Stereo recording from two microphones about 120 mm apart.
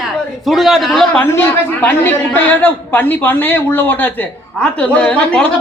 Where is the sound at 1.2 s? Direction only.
15° left (ahead or behind).